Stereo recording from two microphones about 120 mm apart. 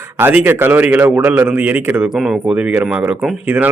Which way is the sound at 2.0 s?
5° right (ahead or behind).